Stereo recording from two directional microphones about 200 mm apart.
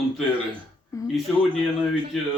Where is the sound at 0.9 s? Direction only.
15° left (ahead or behind).